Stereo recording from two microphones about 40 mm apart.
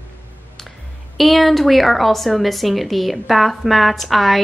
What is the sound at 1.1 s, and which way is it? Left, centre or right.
A woman's voice, centre.